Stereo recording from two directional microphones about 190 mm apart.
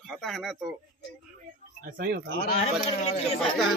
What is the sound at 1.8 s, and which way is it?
Speech, 50° right (ahead or behind).